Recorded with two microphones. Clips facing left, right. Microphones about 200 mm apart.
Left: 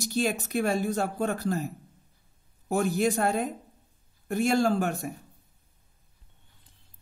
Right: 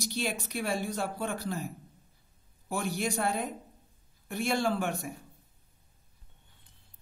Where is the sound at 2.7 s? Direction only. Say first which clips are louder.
Left 7 dB; 45° left (ahead or behind).